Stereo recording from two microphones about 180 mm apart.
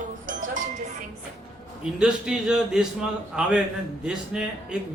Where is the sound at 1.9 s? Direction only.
5° right (ahead or behind).